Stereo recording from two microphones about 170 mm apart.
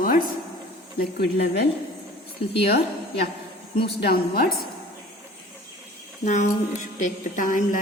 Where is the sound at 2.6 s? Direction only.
65° left (ahead or behind).